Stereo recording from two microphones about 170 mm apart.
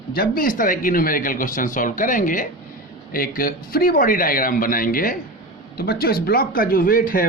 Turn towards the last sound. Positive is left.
turn(degrees=55)  # may be behind; listen again after turning